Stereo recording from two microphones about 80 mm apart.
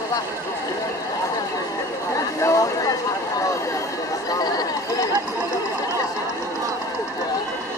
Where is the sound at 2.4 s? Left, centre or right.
Left.